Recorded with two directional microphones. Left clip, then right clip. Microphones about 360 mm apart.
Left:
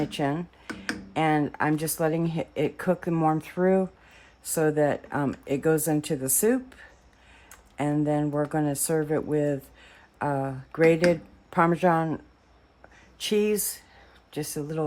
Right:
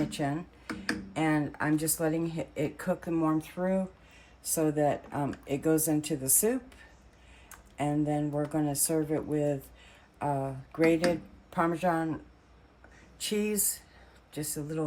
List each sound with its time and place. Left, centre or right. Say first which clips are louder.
0.1 s speech: left 5 dB; centre
7.8 s speech: left 4 dB; left
13.2 s speech: left 7 dB; centre